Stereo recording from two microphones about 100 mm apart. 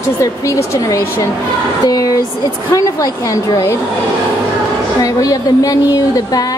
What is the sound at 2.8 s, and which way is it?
A woman's voice, 35° left (ahead or behind).